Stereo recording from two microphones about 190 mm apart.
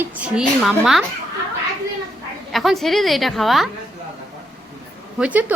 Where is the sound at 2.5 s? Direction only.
Centre (ahead or behind).